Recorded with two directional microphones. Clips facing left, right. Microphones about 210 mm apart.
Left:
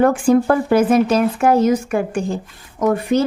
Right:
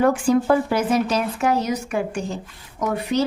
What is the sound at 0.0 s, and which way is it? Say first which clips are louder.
A woman's voice: left 4 dB; 50° left (ahead or behind).